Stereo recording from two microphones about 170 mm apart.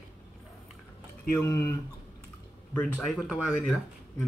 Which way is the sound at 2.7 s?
Centre (ahead or behind).